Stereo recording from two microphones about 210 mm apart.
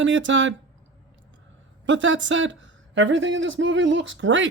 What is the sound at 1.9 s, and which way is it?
Speech, 60° right (ahead or behind).